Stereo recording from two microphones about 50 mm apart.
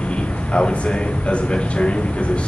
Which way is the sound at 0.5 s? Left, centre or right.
Centre.